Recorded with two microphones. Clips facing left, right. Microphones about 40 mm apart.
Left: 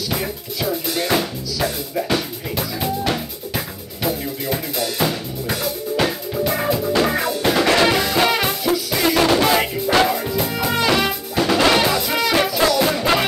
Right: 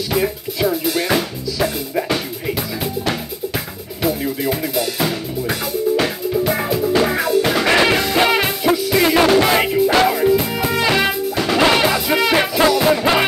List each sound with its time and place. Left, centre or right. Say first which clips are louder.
0.1 s music: right 5 dB; centre
4.5 s drum: right 1 dB; centre
7.6 s music: right 1 dB; centre
10.8 s music: right 2 dB; centre